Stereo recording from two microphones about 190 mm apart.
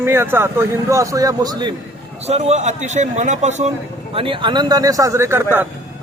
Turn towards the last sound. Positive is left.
turn(degrees=-10)  # may be behind; listen again after turning